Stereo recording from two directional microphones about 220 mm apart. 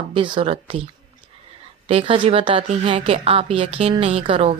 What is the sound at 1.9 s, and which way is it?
Speech, 25° right (ahead or behind).